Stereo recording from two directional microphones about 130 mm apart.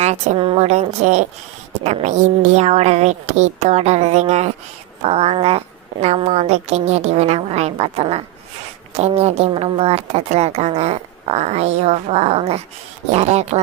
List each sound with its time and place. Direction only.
0.0 s a woman's voice: 60° right (ahead or behind)
0.3 s a woman's voice: 45° right (ahead or behind); by 13.6 s 60° right (ahead or behind)